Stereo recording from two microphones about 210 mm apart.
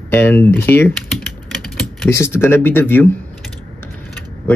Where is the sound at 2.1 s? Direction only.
10° left (ahead or behind).